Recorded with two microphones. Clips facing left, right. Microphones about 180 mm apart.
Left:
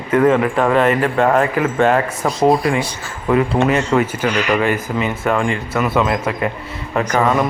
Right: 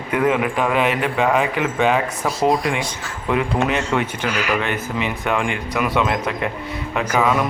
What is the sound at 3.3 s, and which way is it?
Speech, centre (ahead or behind).